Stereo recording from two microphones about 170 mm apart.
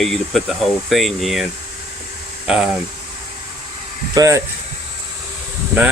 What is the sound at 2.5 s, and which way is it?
Speech, 5° right (ahead or behind).